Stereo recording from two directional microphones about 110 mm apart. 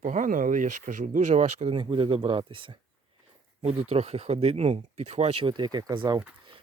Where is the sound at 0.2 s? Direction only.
90° right.